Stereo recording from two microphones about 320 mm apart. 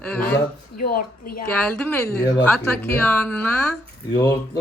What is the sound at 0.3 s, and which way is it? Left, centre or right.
Speech, left.